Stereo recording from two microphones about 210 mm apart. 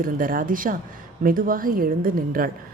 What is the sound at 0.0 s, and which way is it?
A woman's voice, 40° right (ahead or behind).